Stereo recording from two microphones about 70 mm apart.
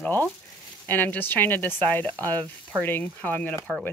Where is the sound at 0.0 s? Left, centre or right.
Left.